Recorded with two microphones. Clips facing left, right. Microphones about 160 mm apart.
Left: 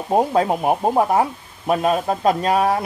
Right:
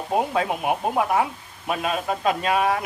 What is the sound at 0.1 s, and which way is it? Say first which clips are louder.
Speech: left 6 dB; 35° left (ahead or behind).